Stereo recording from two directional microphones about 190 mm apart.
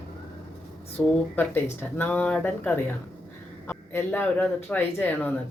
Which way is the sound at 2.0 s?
10° left (ahead or behind).